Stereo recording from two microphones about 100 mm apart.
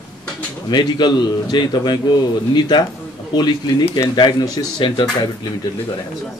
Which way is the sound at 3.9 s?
45° left (ahead or behind).